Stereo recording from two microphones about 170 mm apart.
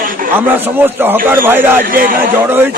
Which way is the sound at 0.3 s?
10° right (ahead or behind).